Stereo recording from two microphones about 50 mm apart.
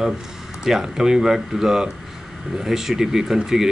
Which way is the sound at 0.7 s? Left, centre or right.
Centre.